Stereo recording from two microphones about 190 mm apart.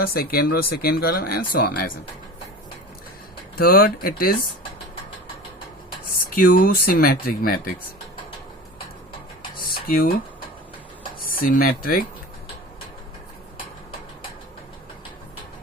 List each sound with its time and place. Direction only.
0.0 s speech: 50° left (ahead or behind)
3.6 s speech: 50° left (ahead or behind)
6.1 s speech: 50° left (ahead or behind)
9.6 s a sound: 50° left (ahead or behind)
11.2 s speech: 50° left (ahead or behind)